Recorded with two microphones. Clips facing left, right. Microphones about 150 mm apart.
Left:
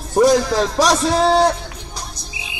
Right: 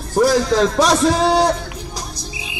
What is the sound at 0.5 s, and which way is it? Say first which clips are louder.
Speech: right 2 dB; 5° left (ahead or behind).